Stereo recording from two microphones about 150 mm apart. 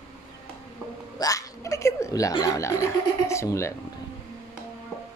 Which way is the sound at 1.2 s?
25° left (ahead or behind).